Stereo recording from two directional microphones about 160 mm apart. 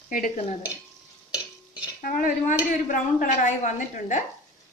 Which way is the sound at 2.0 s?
60° left (ahead or behind).